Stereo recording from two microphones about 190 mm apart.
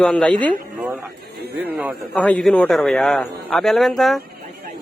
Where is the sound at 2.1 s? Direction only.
5° left (ahead or behind).